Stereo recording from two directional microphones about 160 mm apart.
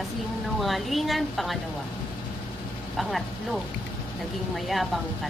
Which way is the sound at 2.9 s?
Centre (ahead or behind).